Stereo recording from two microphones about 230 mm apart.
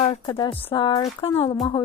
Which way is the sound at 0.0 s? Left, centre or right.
Left.